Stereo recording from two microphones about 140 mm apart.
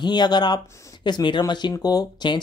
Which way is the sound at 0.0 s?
30° left (ahead or behind).